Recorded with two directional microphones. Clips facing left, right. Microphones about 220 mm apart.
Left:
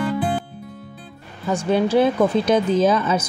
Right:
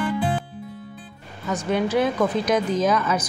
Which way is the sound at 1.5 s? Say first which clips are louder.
Left 4 dB; 30° left (ahead or behind).